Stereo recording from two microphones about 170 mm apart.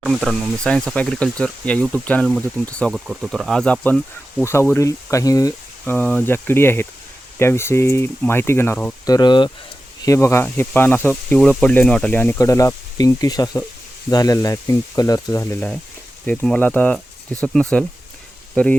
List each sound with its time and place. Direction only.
0.0 s speech: centre (ahead or behind); by 5.5 s 20° left (ahead or behind)
5.8 s speech: 10° left (ahead or behind)
9.0 s speech: 25° left (ahead or behind); by 17.8 s 5° left (ahead or behind)
18.5 s frying: 10° left (ahead or behind)